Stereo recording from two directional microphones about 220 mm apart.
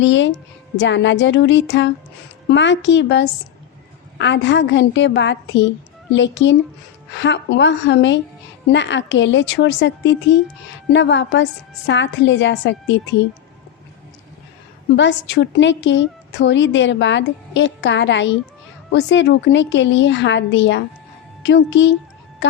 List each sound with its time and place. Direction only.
0.0 s a woman's voice: 55° left (ahead or behind)
14.9 s a woman's voice: 55° left (ahead or behind)